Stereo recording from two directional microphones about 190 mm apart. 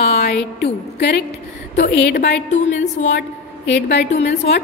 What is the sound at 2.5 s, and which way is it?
Speech, 40° left (ahead or behind).